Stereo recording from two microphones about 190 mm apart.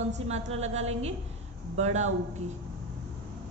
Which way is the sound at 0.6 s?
35° right (ahead or behind).